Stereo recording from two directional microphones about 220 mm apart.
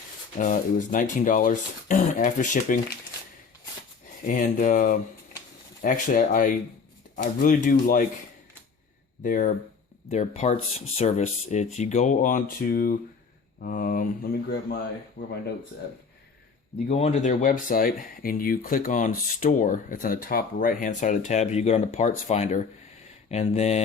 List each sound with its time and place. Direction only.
0.3 s speech: 35° left (ahead or behind)
4.3 s speech: 35° left (ahead or behind)
9.2 s speech: 40° left (ahead or behind)
16.9 s speech: 30° left (ahead or behind)